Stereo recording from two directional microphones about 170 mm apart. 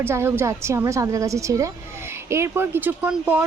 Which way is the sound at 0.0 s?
15° right (ahead or behind).